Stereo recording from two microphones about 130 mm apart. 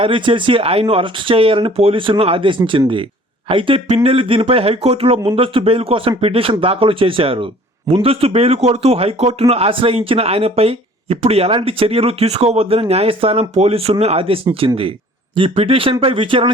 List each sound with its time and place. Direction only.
0.0 s a man's voice: 40° right (ahead or behind)